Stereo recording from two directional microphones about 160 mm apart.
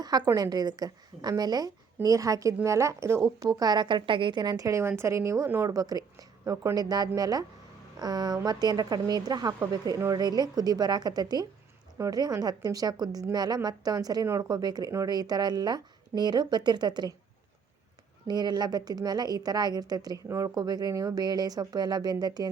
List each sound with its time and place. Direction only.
0.0 s a woman's voice: 25° right (ahead or behind)
18.3 s a woman's voice: 25° right (ahead or behind)